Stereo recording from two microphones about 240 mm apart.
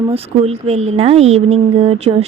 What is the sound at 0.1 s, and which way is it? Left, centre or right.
Speech, right.